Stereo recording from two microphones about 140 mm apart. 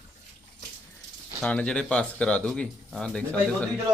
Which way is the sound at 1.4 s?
5° left (ahead or behind).